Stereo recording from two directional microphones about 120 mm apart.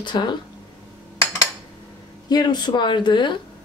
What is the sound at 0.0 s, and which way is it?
Speech, 40° left (ahead or behind).